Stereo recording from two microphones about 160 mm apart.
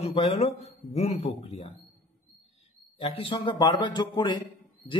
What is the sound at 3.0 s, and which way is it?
A man's voice, 35° left (ahead or behind).